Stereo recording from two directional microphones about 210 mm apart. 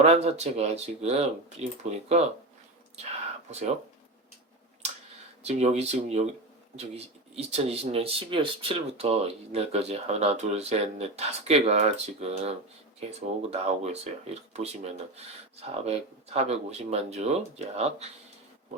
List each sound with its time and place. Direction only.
0.0 s speech: 30° right (ahead or behind)
3.5 s speech: 30° right (ahead or behind)
5.4 s speech: 30° right (ahead or behind)